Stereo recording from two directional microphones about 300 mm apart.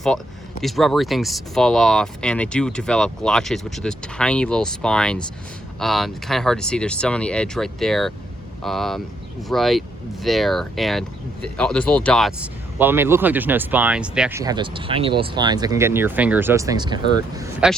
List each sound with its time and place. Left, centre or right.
0.6 s speech: centre